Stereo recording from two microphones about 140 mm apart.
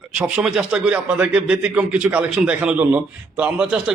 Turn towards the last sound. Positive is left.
turn(degrees=-5)  # may be behind; listen again after turning